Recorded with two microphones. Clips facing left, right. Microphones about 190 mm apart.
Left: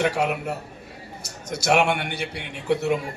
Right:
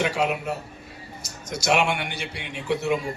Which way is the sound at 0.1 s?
60° left (ahead or behind).